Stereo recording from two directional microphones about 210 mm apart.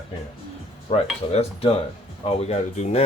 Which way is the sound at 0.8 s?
30° left (ahead or behind).